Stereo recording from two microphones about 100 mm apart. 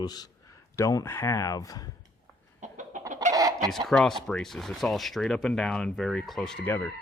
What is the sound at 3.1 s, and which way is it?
Chicken, 35° right (ahead or behind).